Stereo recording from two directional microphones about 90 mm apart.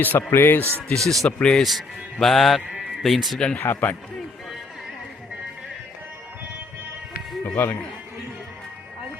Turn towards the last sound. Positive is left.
turn(degrees=25)  # may be behind; listen again after turning